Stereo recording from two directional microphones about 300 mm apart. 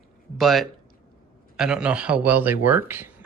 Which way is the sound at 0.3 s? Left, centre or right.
Centre.